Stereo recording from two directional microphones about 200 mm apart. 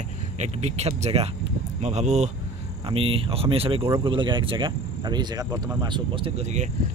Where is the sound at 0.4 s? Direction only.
35° right (ahead or behind).